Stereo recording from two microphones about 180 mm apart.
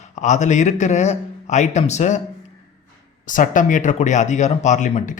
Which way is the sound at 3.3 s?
45° left (ahead or behind).